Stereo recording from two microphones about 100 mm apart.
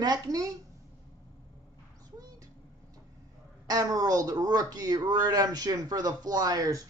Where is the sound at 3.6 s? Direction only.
40° right (ahead or behind).